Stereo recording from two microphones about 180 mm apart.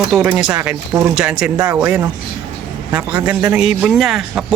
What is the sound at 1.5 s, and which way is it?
Speech, 15° right (ahead or behind).